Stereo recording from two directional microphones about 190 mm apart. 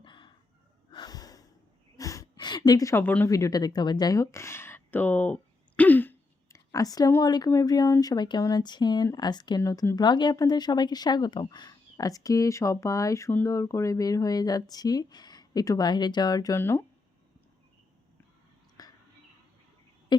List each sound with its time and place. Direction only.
0.0 s chicken: 25° left (ahead or behind)
0.9 s snort: 20° left (ahead or behind)
2.0 s a woman's voice: 15° left (ahead or behind)
18.8 s whispering: 20° left (ahead or behind)